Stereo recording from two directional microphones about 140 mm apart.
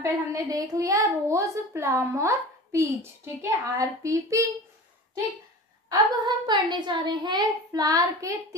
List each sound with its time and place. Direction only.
0.0 s a woman's voice: 25° right (ahead or behind)
5.9 s a woman's voice: 30° right (ahead or behind)